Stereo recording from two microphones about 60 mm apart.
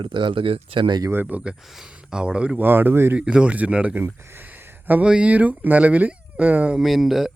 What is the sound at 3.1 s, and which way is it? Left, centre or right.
Speech, centre.